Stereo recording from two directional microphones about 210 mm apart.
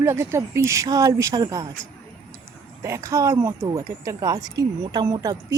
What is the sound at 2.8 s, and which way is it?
Speech, 15° right (ahead or behind).